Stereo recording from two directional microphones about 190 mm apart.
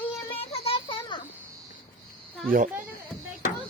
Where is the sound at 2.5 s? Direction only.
45° right (ahead or behind).